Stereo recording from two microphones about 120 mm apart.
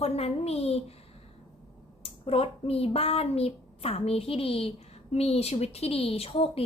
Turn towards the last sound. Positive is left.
turn(degrees=55)  # may be behind; listen again after turning